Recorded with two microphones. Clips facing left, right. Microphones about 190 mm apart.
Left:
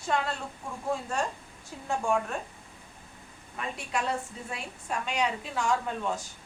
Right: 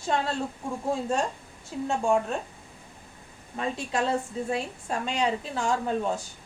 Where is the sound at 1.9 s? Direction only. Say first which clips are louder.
Right 3 dB; 25° right (ahead or behind).